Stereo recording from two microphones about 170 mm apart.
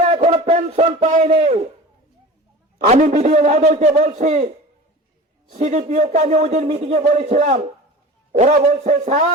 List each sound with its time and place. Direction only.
0.0 s a sound: 35° right (ahead or behind)
1.0 s a man's voice: 40° right (ahead or behind)
2.8 s speech: 40° right (ahead or behind)